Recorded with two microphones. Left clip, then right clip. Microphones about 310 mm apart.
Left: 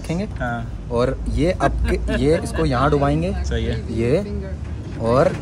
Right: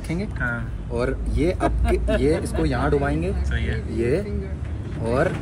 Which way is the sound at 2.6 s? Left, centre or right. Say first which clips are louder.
Left 4 dB; left.